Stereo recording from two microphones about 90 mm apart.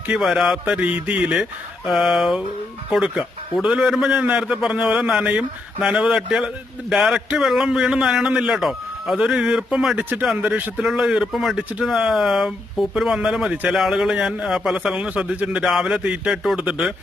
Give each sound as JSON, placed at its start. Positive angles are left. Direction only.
{"t": 0.1, "sound": "speech", "side_deg": -5}
{"t": 0.8, "sound": "a man's voice", "side_deg": -15}
{"t": 10.0, "sound": "a man's voice", "side_deg": -20}